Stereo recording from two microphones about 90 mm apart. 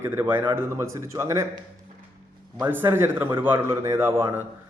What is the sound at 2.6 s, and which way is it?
A man's voice, 25° right (ahead or behind).